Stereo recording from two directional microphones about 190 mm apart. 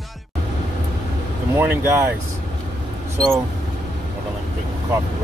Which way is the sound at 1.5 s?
10° right (ahead or behind).